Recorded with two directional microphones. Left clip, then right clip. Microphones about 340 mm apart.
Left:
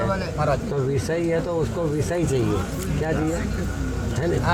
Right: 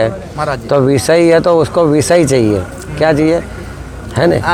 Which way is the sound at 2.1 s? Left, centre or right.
Right.